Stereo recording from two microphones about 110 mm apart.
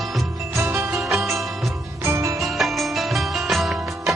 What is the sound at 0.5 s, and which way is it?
Music, 20° right (ahead or behind).